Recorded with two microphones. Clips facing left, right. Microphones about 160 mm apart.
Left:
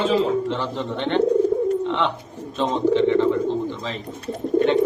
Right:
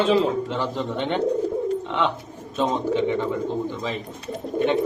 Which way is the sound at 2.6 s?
10° right (ahead or behind).